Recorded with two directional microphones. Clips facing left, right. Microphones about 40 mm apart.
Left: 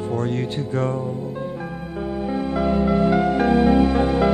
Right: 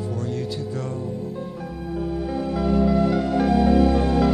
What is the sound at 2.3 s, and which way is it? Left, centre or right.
Music, left.